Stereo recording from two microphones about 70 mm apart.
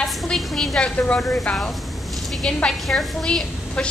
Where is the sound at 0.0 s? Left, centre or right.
Centre.